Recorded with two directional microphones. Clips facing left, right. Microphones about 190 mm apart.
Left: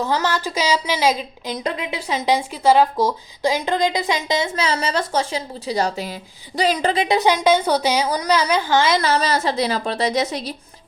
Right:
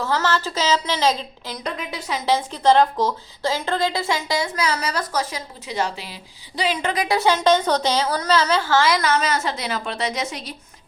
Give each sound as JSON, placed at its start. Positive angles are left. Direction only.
{"t": 0.0, "sound": "speech", "side_deg": 15}
{"t": 1.5, "sound": "a woman's voice", "side_deg": 20}
{"t": 6.9, "sound": "a woman's voice", "side_deg": 20}